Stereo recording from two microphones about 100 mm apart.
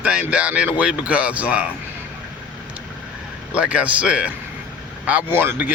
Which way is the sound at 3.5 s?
10° right (ahead or behind).